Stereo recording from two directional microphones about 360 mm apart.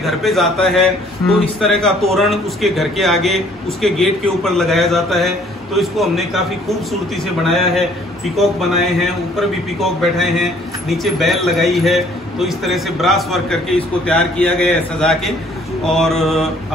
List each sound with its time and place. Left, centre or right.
0.0 s a man's voice: centre
7.4 s a man's voice: centre